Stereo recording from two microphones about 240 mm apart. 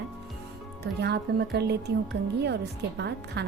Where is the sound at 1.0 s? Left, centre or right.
Right.